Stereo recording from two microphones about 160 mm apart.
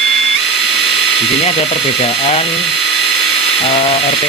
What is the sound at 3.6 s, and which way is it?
Speech, 35° left (ahead or behind).